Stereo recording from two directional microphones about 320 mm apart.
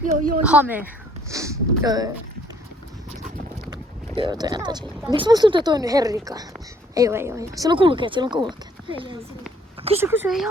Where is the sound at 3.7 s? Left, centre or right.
Centre.